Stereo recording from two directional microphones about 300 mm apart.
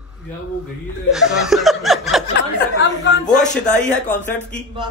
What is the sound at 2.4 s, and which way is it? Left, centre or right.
Speech, left.